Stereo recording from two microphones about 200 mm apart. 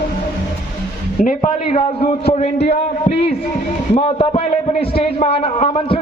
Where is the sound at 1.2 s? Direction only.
40° left (ahead or behind).